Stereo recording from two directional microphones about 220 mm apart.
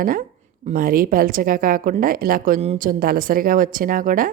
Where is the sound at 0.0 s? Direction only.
40° right (ahead or behind).